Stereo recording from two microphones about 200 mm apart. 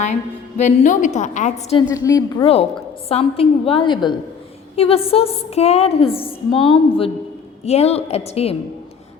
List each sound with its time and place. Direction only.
0.0 s a woman's voice: 35° left (ahead or behind)
1.7 s a woman's voice: 20° left (ahead or behind)